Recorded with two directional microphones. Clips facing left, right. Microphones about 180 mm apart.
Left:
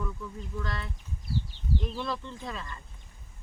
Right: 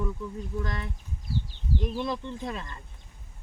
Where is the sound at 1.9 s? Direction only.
20° right (ahead or behind).